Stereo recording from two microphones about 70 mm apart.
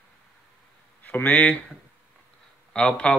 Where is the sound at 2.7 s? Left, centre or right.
Centre.